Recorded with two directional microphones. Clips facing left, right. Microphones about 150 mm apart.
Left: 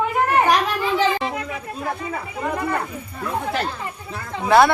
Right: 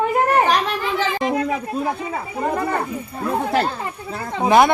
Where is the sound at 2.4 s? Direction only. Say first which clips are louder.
Right 3 dB; 35° right (ahead or behind).